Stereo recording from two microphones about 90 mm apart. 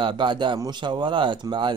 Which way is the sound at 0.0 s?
60° right (ahead or behind).